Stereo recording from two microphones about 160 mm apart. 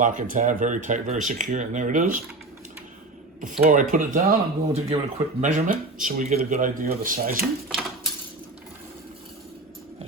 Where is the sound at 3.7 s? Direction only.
55° right (ahead or behind).